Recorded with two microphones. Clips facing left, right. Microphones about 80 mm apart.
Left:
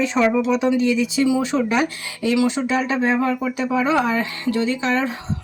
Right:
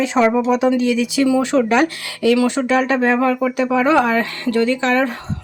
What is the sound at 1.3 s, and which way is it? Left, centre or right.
Speech, right.